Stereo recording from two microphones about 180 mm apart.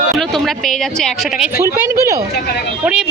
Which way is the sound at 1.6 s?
15° right (ahead or behind).